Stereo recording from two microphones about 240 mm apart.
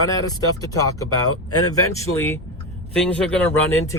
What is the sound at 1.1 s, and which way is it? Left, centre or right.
Speech, left.